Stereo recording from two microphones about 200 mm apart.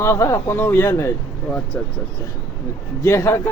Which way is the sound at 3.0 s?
15° left (ahead or behind).